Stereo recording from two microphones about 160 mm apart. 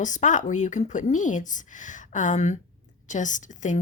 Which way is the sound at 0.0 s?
50° left (ahead or behind).